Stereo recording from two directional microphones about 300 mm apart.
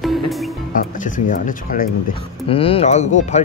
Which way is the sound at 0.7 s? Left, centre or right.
Left.